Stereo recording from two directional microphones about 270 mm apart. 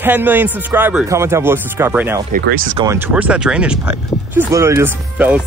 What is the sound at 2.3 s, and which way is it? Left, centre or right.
Speech, right.